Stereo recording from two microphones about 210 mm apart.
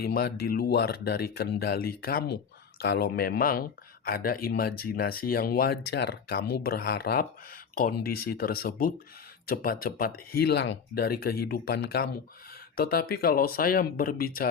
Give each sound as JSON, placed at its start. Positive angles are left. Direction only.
{"t": 0.0, "sound": "speech", "side_deg": 45}